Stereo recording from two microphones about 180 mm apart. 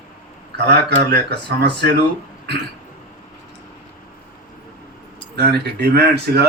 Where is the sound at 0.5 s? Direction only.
65° right (ahead or behind).